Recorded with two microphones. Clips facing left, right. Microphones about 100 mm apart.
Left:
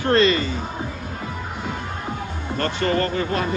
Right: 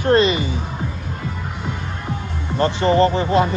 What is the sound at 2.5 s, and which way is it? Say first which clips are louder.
Speech: right 6 dB; 20° right (ahead or behind).